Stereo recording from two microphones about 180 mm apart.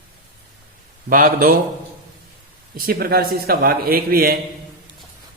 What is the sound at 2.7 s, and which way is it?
A man's voice, 55° right (ahead or behind).